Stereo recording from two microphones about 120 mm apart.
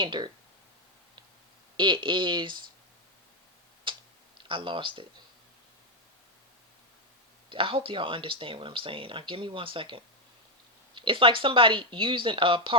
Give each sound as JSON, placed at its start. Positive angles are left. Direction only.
{"t": 0.0, "sound": "speech", "side_deg": -40}
{"t": 1.7, "sound": "speech", "side_deg": -40}
{"t": 3.9, "sound": "tick-tock", "side_deg": -45}
{"t": 4.4, "sound": "speech", "side_deg": -45}
{"t": 7.5, "sound": "speech", "side_deg": -45}